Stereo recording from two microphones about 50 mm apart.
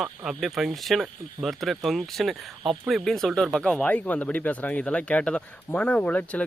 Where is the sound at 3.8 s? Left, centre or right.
Left.